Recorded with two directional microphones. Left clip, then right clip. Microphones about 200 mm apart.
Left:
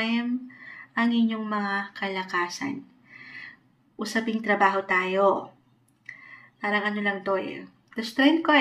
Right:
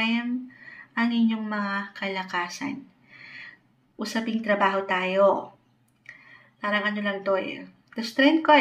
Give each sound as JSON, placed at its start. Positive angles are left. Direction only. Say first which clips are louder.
{"t": 0.0, "sound": "a sound", "louder": "right 1 dB", "side_deg": -20}
{"t": 0.9, "sound": "a woman's voice", "louder": "even", "side_deg": -20}
{"t": 6.6, "sound": "speech", "louder": "even", "side_deg": -20}